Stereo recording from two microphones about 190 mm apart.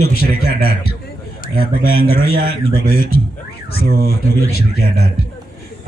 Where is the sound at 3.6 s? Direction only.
55° left (ahead or behind).